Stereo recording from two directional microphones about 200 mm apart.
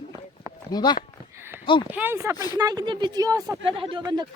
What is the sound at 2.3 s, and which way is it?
Speech, 20° left (ahead or behind).